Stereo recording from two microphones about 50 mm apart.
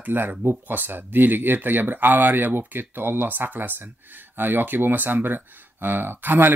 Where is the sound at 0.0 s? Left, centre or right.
Right.